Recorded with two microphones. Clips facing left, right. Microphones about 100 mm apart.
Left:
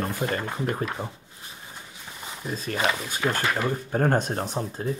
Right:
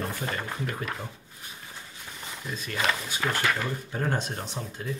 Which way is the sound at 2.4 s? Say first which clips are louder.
Left 4 dB; 35° left (ahead or behind).